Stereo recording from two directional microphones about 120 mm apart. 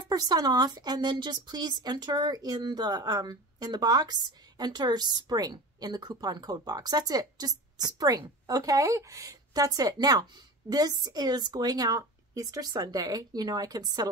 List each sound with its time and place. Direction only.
0.1 s a woman's voice: 30° right (ahead or behind)